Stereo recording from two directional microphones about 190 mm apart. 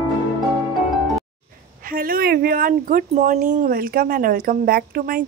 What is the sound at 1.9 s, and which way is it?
Speech, 50° right (ahead or behind).